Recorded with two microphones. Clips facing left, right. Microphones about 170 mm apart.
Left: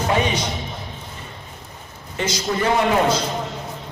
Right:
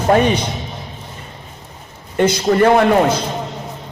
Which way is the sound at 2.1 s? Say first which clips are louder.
Right 9 dB; 55° right (ahead or behind).